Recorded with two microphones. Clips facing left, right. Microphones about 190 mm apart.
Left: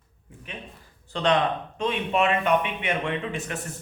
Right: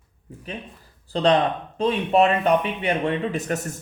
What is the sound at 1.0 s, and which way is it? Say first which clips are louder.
Speech: right 4 dB; 35° right (ahead or behind).